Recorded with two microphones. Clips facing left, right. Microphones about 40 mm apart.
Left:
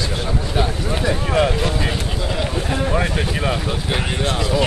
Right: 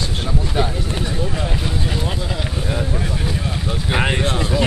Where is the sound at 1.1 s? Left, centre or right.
Left.